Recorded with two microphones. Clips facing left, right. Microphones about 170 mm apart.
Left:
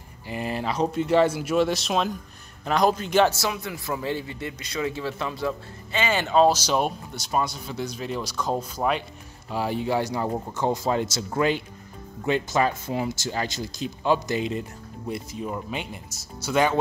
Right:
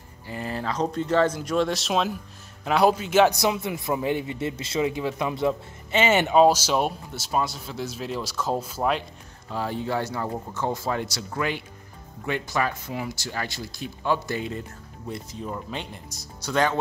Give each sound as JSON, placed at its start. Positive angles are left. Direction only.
{"t": 0.3, "sound": "a man's voice", "side_deg": 15}
{"t": 3.3, "sound": "a man's voice", "side_deg": -20}
{"t": 9.5, "sound": "speech", "side_deg": 10}